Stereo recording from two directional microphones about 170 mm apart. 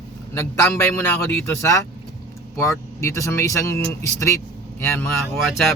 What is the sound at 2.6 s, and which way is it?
A man's voice, 15° left (ahead or behind).